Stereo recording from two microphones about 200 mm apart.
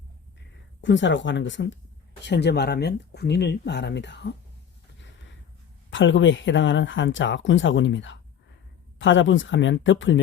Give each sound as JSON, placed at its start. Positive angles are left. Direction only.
{"t": 0.8, "sound": "speech", "side_deg": 65}
{"t": 5.9, "sound": "speech", "side_deg": 65}